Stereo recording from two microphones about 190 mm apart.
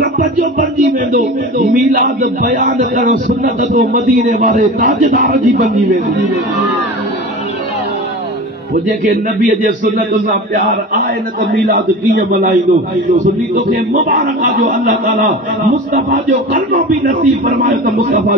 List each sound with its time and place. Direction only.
0.0 s a man's voice: 45° right (ahead or behind)
8.7 s a man's voice: 45° right (ahead or behind)
12.1 s a man's voice: 45° right (ahead or behind)